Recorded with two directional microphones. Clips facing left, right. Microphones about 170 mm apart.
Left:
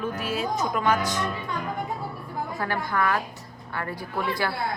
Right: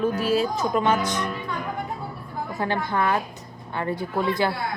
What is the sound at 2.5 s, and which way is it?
A woman's voice, 20° right (ahead or behind).